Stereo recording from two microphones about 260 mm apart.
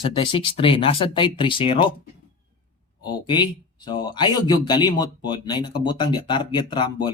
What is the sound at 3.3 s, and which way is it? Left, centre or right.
Speech, centre.